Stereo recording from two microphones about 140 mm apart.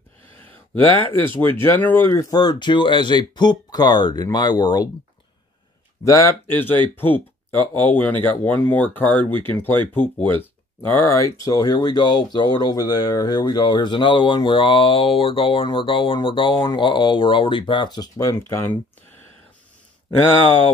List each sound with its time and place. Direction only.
0.4 s a sound: 15° left (ahead or behind)
1.1 s speech: 15° left (ahead or behind)
6.0 s speech: 20° left (ahead or behind)